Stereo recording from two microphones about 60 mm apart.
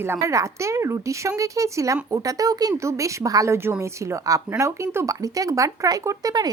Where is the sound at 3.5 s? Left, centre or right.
Right.